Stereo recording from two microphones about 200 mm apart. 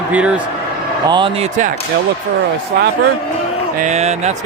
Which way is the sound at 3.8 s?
35° right (ahead or behind).